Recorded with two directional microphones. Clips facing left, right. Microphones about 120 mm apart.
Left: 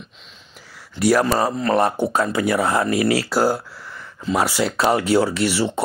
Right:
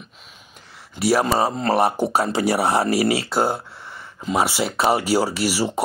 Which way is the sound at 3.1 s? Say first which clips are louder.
Left 2 dB; centre (ahead or behind).